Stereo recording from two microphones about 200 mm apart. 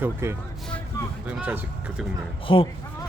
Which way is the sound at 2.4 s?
25° left (ahead or behind).